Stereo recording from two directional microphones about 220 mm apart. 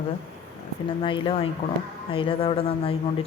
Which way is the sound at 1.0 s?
25° left (ahead or behind).